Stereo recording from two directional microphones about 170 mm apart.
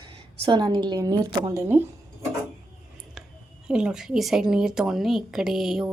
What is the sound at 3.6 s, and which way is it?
Speech, 5° right (ahead or behind).